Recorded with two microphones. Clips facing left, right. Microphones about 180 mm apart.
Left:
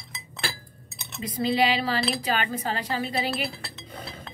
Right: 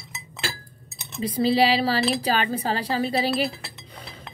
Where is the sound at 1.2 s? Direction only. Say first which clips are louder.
Right 4 dB; 30° right (ahead or behind).